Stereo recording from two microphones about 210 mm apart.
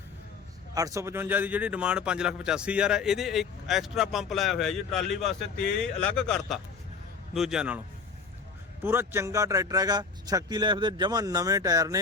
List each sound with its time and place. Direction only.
0.7 s speech: 15° right (ahead or behind)
8.8 s speech: 10° right (ahead or behind)